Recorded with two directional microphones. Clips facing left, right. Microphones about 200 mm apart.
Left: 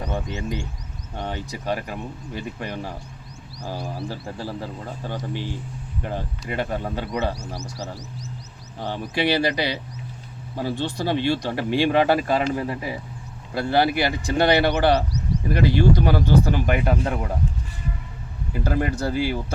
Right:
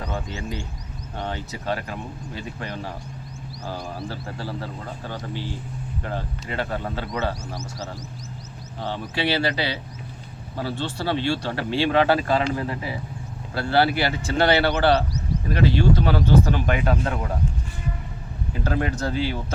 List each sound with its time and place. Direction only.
0.0 s speech: 20° left (ahead or behind)
8.8 s speech: 15° left (ahead or behind)
18.6 s speech: 10° left (ahead or behind)